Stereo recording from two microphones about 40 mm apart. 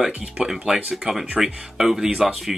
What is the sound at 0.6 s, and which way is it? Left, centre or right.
Speech, right.